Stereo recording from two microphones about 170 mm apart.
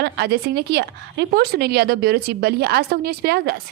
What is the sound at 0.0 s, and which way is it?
A woman's voice, 75° right (ahead or behind).